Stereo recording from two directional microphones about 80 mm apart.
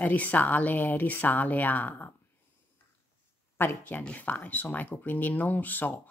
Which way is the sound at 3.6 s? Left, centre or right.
Left.